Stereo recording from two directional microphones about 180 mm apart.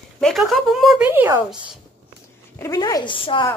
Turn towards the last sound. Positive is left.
turn(degrees=30)  # may be behind; listen again after turning